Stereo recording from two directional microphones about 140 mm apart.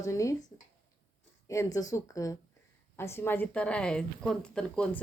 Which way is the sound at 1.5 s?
25° left (ahead or behind).